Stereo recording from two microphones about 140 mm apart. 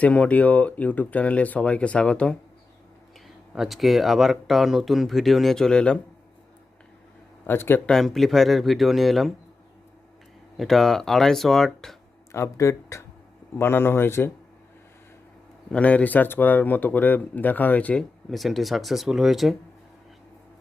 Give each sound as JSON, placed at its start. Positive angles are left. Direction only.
{"t": 0.0, "sound": "speech", "side_deg": 10}
{"t": 3.5, "sound": "speech", "side_deg": 0}
{"t": 7.4, "sound": "speech", "side_deg": 15}
{"t": 7.9, "sound": "speech", "side_deg": 0}
{"t": 10.6, "sound": "speech", "side_deg": 0}
{"t": 12.3, "sound": "speech", "side_deg": 20}
{"t": 15.7, "sound": "speech", "side_deg": 10}
{"t": 18.3, "sound": "speech", "side_deg": 0}